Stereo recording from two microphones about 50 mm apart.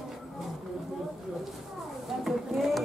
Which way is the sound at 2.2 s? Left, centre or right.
Centre.